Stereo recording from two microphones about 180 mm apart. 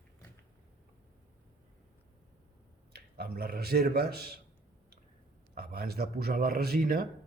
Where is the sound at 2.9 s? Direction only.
60° right (ahead or behind).